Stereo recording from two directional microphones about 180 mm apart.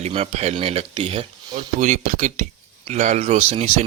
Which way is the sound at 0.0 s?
35° right (ahead or behind).